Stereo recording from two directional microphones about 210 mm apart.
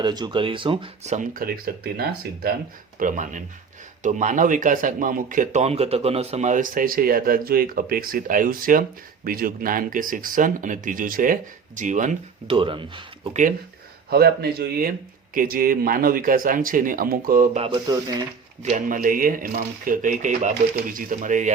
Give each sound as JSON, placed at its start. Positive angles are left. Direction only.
{"t": 0.0, "sound": "speech", "side_deg": -20}
{"t": 12.5, "sound": "speech", "side_deg": -25}
{"t": 14.1, "sound": "speech", "side_deg": -50}
{"t": 17.7, "sound": "speech", "side_deg": -20}
{"t": 18.6, "sound": "speech", "side_deg": -40}